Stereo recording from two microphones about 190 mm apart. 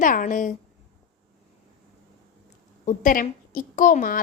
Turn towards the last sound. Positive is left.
turn(degrees=45)  # may be behind; listen again after turning